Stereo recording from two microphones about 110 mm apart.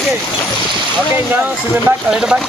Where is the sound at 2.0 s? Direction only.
5° right (ahead or behind).